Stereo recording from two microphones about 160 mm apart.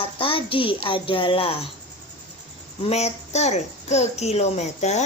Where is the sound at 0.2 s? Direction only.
35° left (ahead or behind).